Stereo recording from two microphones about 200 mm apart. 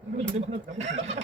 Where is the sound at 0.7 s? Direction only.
35° right (ahead or behind).